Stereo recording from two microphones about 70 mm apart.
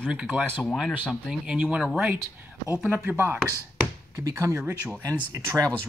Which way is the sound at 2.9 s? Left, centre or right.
Right.